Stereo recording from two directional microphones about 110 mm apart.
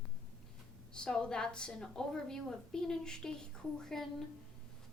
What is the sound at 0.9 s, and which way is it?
A woman's voice, 10° left (ahead or behind).